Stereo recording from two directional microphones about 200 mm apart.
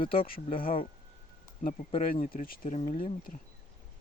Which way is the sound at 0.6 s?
45° left (ahead or behind).